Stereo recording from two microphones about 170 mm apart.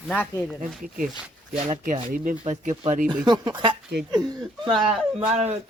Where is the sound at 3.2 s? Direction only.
25° right (ahead or behind).